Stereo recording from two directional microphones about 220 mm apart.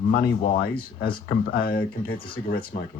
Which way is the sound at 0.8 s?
40° left (ahead or behind).